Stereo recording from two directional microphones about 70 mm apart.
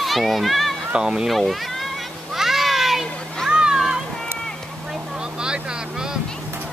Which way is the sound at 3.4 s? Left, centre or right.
Centre.